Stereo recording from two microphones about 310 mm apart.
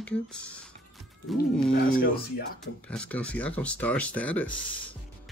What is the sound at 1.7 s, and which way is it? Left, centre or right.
Speech, left.